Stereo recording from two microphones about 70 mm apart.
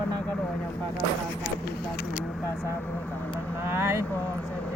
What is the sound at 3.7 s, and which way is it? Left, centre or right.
Speech, right.